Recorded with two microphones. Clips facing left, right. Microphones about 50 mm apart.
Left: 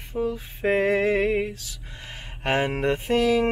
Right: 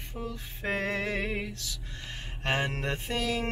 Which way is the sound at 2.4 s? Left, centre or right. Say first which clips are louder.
Left 7 dB; centre.